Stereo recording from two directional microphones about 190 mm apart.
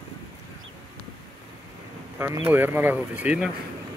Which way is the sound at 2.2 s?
10° right (ahead or behind).